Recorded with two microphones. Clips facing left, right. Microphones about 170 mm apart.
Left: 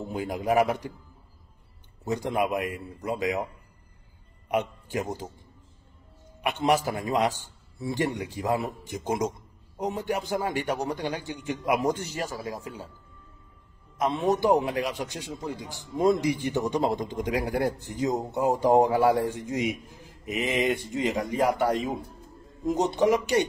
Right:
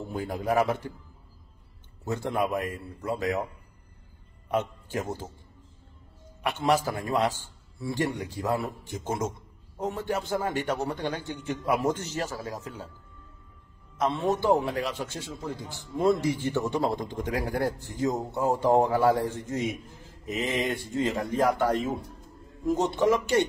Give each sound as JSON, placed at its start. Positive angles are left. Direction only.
{"t": 0.1, "sound": "a man's voice", "side_deg": 15}
{"t": 2.0, "sound": "a man's voice", "side_deg": 15}
{"t": 4.5, "sound": "a man's voice", "side_deg": 15}
{"t": 6.4, "sound": "a man's voice", "side_deg": 20}
{"t": 13.9, "sound": "a man's voice", "side_deg": 15}